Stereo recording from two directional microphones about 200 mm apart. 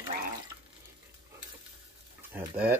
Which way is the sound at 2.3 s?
10° right (ahead or behind).